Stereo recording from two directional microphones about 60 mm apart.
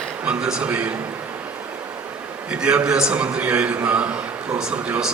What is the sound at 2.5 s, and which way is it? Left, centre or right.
A man's voice, centre.